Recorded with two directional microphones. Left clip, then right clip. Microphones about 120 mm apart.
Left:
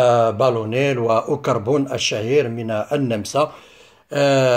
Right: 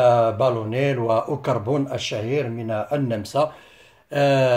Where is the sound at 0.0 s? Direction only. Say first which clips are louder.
Left 2 dB; 50° left (ahead or behind).